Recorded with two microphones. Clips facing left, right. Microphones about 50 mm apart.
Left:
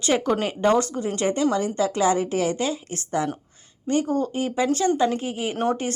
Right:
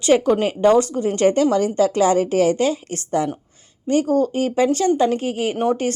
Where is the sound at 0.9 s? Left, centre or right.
Right.